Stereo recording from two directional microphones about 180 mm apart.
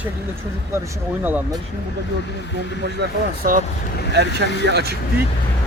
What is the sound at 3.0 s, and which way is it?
Speech, 70° right (ahead or behind).